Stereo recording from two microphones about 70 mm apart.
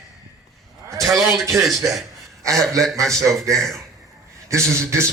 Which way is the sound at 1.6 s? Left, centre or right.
Centre.